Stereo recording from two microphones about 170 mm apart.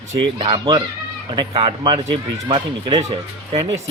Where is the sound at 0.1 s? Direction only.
30° right (ahead or behind).